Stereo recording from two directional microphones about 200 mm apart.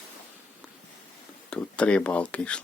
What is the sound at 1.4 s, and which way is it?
Speech, 5° left (ahead or behind).